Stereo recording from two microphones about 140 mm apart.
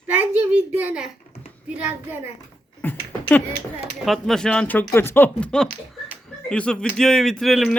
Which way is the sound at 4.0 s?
Centre (ahead or behind).